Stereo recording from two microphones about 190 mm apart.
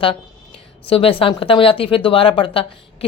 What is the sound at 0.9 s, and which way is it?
A woman's voice, 30° left (ahead or behind).